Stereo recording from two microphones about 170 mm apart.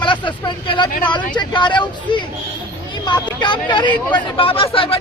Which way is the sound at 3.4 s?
25° left (ahead or behind).